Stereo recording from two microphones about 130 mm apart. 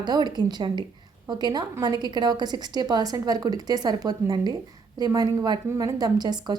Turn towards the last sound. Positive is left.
turn(degrees=-30)  # may be behind; listen again after turning